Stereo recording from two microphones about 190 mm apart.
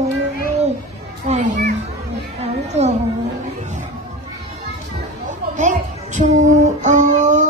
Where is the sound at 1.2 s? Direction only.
40° right (ahead or behind).